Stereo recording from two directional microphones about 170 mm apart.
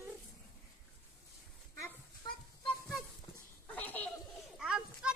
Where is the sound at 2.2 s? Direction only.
25° left (ahead or behind).